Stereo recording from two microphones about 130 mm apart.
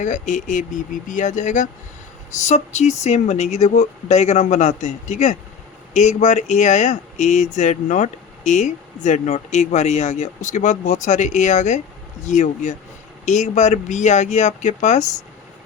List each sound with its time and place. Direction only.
0.0 s speech: 75° left (ahead or behind)